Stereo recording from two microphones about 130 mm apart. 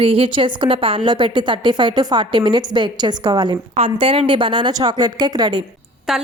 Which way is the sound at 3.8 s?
45° right (ahead or behind).